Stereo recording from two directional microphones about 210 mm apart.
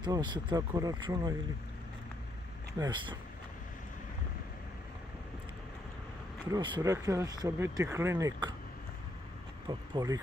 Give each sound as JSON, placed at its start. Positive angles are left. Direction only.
{"t": 0.0, "sound": "speech", "side_deg": -20}
{"t": 2.8, "sound": "speech", "side_deg": -20}
{"t": 6.5, "sound": "speech", "side_deg": -20}
{"t": 9.7, "sound": "speech", "side_deg": -20}